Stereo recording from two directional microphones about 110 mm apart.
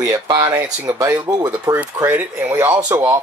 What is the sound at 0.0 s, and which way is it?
Speech, 30° right (ahead or behind).